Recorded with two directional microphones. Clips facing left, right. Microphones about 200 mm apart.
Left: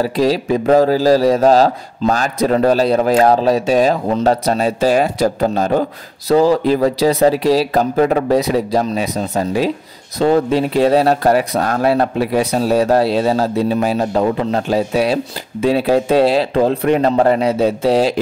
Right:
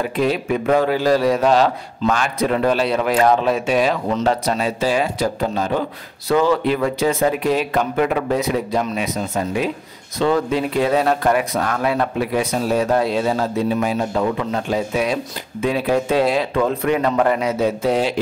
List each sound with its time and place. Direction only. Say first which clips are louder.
0.0 s speech: left 4 dB; 35° left (ahead or behind)